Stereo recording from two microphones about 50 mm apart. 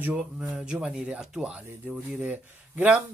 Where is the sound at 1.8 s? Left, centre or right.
Right.